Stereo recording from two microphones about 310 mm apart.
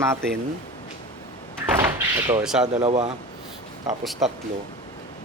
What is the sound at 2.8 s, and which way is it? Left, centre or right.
Speech, centre.